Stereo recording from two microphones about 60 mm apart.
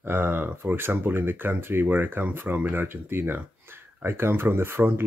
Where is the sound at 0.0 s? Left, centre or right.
Right.